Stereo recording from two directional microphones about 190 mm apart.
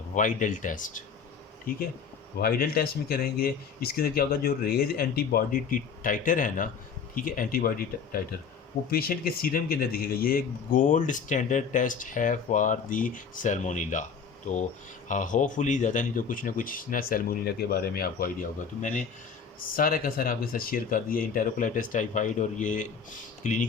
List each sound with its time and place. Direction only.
0.1 s speech: 40° left (ahead or behind)
18.8 s speech: 40° left (ahead or behind)